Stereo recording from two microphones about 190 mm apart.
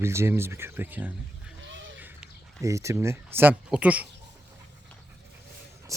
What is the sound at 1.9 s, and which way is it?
Speech, 10° right (ahead or behind).